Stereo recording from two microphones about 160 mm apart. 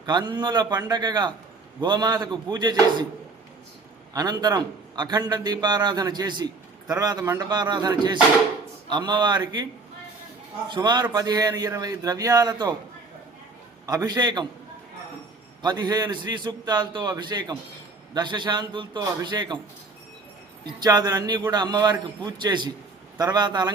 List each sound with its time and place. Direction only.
0.0 s a man's voice: 25° right (ahead or behind)
4.1 s a man's voice: 25° right (ahead or behind)
10.7 s a man's voice: 25° right (ahead or behind)
13.8 s a man's voice: 25° right (ahead or behind)
15.6 s a man's voice: 25° right (ahead or behind)
20.7 s a man's voice: 25° right (ahead or behind)